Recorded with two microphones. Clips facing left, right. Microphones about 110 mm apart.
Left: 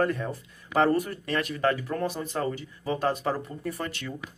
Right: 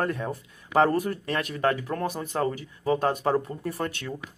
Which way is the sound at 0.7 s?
10° right (ahead or behind).